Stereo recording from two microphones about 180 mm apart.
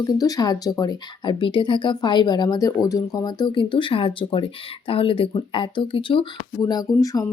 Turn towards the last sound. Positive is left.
turn(degrees=20)  # may be behind; listen again after turning